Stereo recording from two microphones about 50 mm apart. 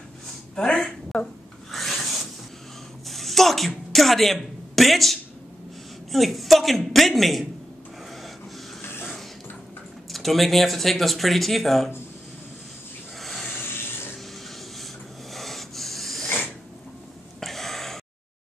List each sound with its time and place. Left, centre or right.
0.6 s a woman's voice: centre
1.7 s filing: centre
3.1 s a sound: centre
6.1 s speech: centre
10.1 s speech: centre
13.2 s snake: centre
13.5 s a sound: left
15.3 s rub: centre
17.4 s gasp: centre